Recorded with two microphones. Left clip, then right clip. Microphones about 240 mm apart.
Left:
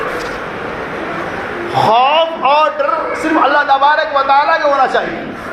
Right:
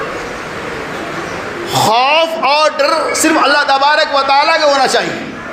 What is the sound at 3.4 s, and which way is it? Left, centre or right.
A man's voice, right.